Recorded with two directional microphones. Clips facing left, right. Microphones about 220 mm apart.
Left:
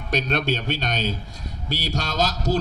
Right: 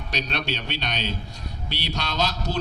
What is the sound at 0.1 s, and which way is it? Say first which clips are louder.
A man's voice: left 6 dB; 50° left (ahead or behind).